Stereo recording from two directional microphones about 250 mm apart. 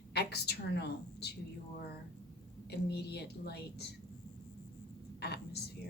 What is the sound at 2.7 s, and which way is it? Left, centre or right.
Speech, left.